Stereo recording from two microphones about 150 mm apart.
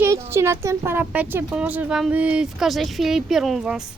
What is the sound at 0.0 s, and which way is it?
Speech, 15° right (ahead or behind).